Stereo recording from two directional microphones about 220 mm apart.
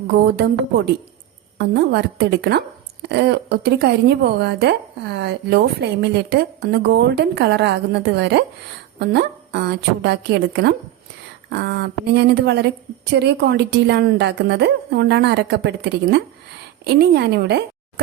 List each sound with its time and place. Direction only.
1.5 s a woman's voice: 50° right (ahead or behind)